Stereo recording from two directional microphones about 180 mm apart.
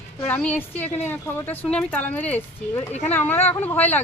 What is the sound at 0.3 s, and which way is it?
A woman's voice, 10° left (ahead or behind).